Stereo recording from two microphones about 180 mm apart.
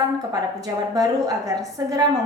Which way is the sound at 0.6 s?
20° right (ahead or behind).